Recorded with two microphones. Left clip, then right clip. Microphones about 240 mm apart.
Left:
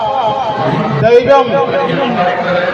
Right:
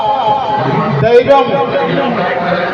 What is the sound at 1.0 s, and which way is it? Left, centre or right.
Speech, left.